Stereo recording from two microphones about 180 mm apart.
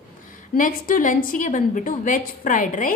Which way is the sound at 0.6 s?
50° left (ahead or behind).